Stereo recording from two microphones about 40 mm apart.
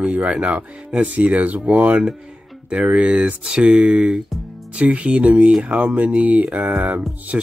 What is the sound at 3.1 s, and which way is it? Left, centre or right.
Speech, right.